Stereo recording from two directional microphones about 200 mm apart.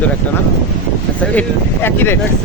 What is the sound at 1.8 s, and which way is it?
Speech, 10° left (ahead or behind).